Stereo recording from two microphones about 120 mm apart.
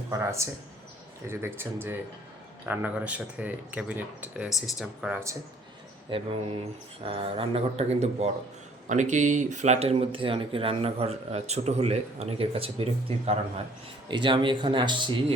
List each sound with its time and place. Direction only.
0.1 s speech: 25° right (ahead or behind); by 5.2 s 10° right (ahead or behind)
6.1 s a man's voice: 45° right (ahead or behind); by 8.3 s 65° right (ahead or behind)
8.9 s speech: 90° right; by 9.9 s 70° right (ahead or behind)
10.1 s a man's voice: 45° right (ahead or behind)
14.1 s speech: 40° right (ahead or behind)